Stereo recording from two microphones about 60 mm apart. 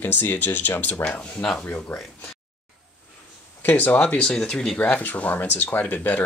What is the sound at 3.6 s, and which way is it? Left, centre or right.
Speech, left.